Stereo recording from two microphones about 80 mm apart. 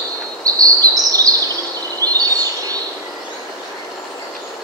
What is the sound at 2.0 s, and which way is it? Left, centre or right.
Bird, right.